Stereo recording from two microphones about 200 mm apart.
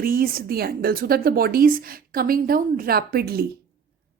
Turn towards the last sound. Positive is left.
turn(degrees=-50)  # may be behind; listen again after turning